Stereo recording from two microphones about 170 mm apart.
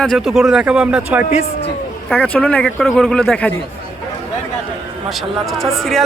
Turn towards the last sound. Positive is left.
turn(degrees=0)  # may be behind; listen again after turning